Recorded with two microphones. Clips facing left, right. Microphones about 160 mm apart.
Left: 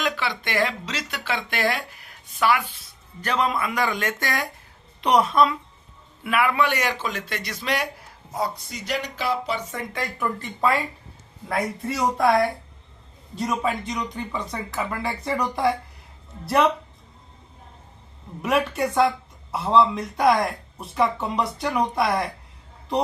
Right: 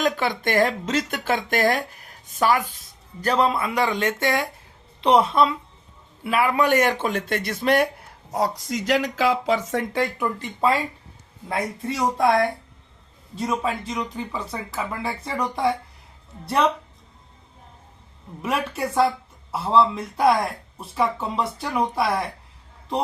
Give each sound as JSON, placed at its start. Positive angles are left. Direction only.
{"t": 0.0, "sound": "speech", "side_deg": -45}
{"t": 3.2, "sound": "a man's voice", "side_deg": -30}
{"t": 8.3, "sound": "speech", "side_deg": -80}
{"t": 10.2, "sound": "speech", "side_deg": -20}
{"t": 11.6, "sound": "speech", "side_deg": 0}
{"t": 13.3, "sound": "speech", "side_deg": 0}
{"t": 18.4, "sound": "a man's voice", "side_deg": 0}